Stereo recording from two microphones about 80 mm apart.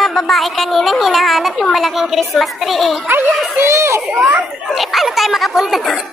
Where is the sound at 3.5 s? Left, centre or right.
Right.